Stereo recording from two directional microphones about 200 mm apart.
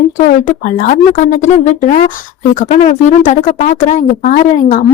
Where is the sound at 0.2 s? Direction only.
40° left (ahead or behind).